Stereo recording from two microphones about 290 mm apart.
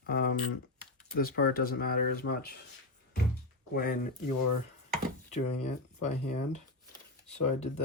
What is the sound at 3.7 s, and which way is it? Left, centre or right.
Speech, left.